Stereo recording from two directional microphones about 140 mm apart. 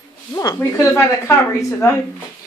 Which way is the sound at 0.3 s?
20° left (ahead or behind).